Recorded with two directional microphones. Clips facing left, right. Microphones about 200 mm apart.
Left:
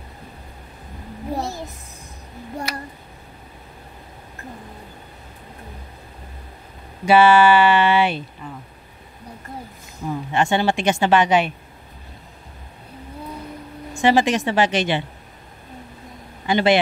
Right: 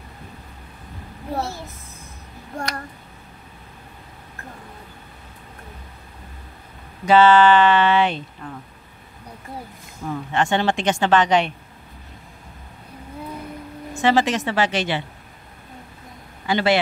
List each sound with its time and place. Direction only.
1.4 s a sound: 15° left (ahead or behind)
2.7 s a sound: 5° left (ahead or behind)
7.1 s a woman's voice: 10° left (ahead or behind)
10.0 s a woman's voice: 10° left (ahead or behind)
13.9 s a woman's voice: 15° left (ahead or behind)
16.4 s a man's voice: 20° left (ahead or behind)